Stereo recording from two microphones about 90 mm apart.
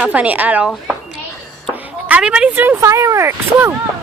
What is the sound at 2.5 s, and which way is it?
Speech, 25° right (ahead or behind).